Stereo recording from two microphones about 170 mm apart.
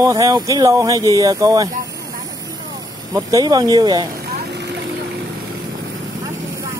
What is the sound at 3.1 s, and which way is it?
Speech, 20° right (ahead or behind).